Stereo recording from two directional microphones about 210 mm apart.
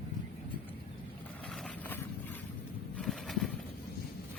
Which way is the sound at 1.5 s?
5° left (ahead or behind).